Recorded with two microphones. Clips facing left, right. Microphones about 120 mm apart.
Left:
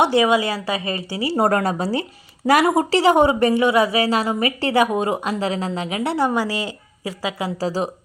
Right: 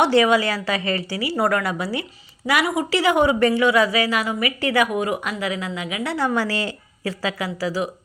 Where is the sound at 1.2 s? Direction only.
35° left (ahead or behind).